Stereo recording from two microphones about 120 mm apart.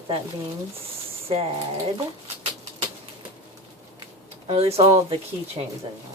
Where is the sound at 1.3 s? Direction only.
55° right (ahead or behind).